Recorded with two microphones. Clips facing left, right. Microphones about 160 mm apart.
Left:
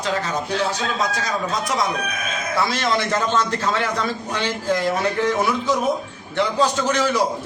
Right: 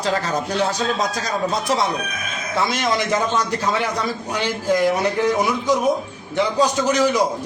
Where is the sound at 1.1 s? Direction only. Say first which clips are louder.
Right 2 dB; 35° right (ahead or behind).